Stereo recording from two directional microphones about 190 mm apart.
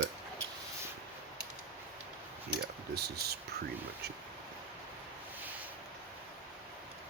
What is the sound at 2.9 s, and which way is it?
Speech, 55° right (ahead or behind).